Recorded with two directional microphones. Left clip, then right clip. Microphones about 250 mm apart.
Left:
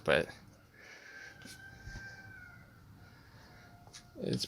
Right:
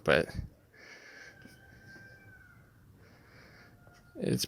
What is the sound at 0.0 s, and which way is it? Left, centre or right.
Speech, centre.